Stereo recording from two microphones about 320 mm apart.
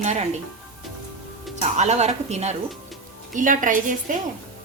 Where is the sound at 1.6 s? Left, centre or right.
Right.